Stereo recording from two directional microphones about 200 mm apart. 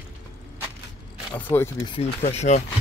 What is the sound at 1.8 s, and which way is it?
Speech, 30° left (ahead or behind).